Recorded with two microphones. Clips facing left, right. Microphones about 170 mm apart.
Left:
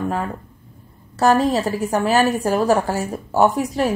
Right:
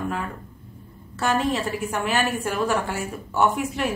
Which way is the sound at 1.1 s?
40° left (ahead or behind).